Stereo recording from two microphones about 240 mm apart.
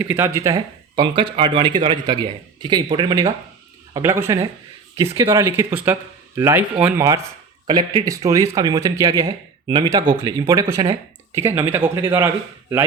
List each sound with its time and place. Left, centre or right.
0.0 s speech: centre
7.7 s speech: centre